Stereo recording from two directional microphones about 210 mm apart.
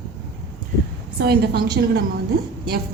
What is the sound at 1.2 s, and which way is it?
Speech, 50° right (ahead or behind).